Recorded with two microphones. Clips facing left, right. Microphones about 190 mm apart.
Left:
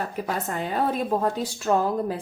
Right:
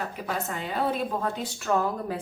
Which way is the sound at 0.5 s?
45° left (ahead or behind).